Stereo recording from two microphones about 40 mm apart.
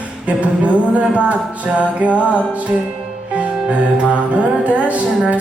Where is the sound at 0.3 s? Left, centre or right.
Right.